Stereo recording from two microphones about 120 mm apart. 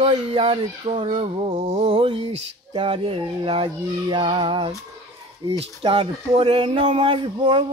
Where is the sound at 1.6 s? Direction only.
60° right (ahead or behind); by 4.7 s 45° right (ahead or behind).